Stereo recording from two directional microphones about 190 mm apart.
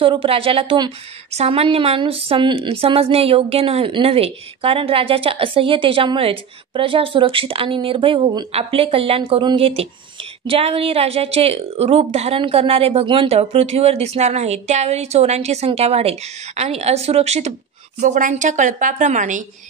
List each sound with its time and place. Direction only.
0.0 s a woman's voice: 30° right (ahead or behind)